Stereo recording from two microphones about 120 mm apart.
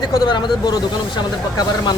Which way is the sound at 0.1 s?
35° left (ahead or behind).